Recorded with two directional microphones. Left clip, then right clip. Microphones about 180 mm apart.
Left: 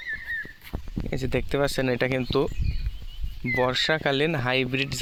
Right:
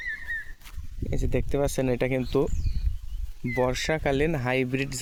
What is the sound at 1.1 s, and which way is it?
Speech, 5° right (ahead or behind).